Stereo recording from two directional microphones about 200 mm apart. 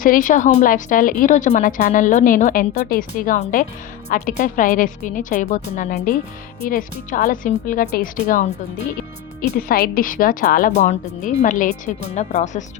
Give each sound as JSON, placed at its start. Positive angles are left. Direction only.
{"t": 0.0, "sound": "a woman's voice", "side_deg": 40}
{"t": 3.2, "sound": "a woman's voice", "side_deg": 35}
{"t": 7.1, "sound": "a woman's voice", "side_deg": 40}
{"t": 9.5, "sound": "a woman's voice", "side_deg": 45}